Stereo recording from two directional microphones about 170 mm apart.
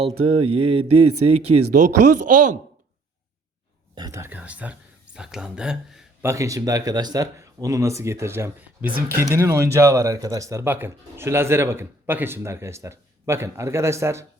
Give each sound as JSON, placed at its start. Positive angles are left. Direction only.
{"t": 0.0, "sound": "speech", "side_deg": -30}
{"t": 3.9, "sound": "speech", "side_deg": -20}
{"t": 6.2, "sound": "speech", "side_deg": -20}